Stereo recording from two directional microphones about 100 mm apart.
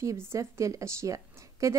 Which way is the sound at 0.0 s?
30° right (ahead or behind).